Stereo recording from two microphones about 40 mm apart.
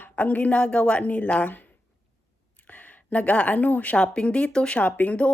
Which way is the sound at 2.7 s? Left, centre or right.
Left.